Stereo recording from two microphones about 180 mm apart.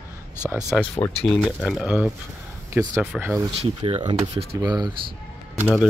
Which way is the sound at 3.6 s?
35° right (ahead or behind).